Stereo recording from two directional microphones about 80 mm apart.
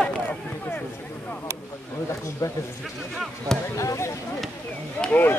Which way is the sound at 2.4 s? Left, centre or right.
Left.